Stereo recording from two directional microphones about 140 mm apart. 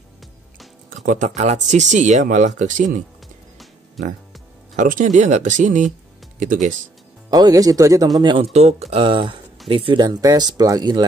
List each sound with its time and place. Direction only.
0.8 s speech: 60° right (ahead or behind)
4.7 s speech: 65° right (ahead or behind)
7.2 s speech: 25° right (ahead or behind)
8.2 s speech: 35° right (ahead or behind)
8.5 s speech: 50° right (ahead or behind); by 11.1 s 30° right (ahead or behind)